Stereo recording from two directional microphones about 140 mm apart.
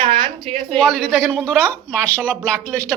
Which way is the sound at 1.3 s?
10° left (ahead or behind).